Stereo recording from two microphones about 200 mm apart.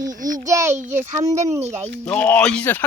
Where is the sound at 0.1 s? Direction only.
40° right (ahead or behind).